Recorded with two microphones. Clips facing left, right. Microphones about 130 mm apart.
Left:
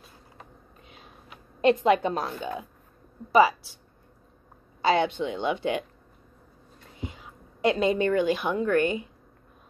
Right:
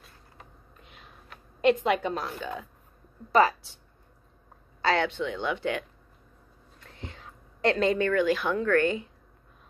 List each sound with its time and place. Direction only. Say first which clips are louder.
1.7 s speech: left 3 dB; 30° left (ahead or behind)
3.3 s speech: left 2 dB; 10° left (ahead or behind)
4.8 s speech: left 3 dB; 15° left (ahead or behind)
7.0 s a woman's voice: left 5 dB; 15° left (ahead or behind)